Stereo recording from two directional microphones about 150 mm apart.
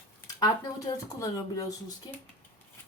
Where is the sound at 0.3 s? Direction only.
25° left (ahead or behind).